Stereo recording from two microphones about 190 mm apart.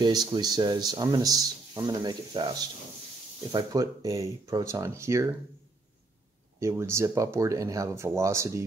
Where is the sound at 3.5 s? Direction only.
20° right (ahead or behind).